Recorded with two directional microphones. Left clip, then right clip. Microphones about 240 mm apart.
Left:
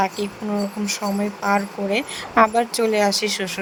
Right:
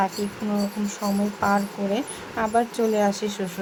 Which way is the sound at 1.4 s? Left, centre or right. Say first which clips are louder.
Left 2 dB; left.